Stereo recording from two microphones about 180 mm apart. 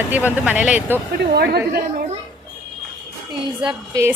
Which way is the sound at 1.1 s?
60° right (ahead or behind).